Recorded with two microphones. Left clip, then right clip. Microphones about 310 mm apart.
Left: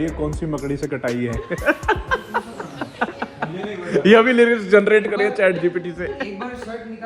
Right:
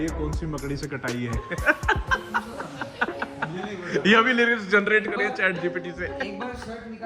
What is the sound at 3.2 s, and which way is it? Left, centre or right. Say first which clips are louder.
A man's voice: left 4 dB; centre.